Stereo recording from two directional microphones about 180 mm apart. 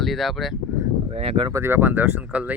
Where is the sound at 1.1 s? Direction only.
35° right (ahead or behind).